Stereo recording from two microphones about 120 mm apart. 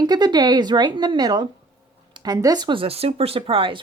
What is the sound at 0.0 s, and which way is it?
A woman's voice, 35° right (ahead or behind).